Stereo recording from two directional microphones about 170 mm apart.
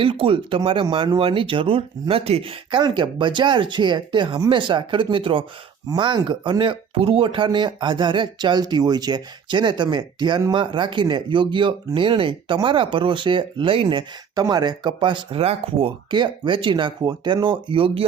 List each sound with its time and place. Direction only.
0.0 s speech: 30° right (ahead or behind)